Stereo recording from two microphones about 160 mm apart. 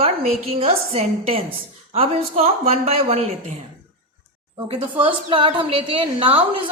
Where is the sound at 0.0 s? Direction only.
40° right (ahead or behind).